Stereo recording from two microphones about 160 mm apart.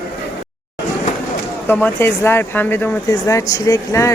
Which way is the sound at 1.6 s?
15° left (ahead or behind).